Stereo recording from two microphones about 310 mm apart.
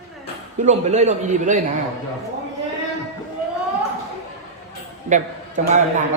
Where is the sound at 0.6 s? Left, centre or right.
Right.